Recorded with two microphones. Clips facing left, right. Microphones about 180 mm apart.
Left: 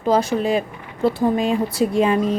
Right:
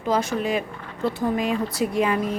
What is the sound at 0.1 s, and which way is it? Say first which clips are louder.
Speech: left 5 dB; 35° left (ahead or behind).